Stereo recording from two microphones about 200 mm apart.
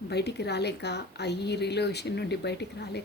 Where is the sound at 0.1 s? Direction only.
55° left (ahead or behind).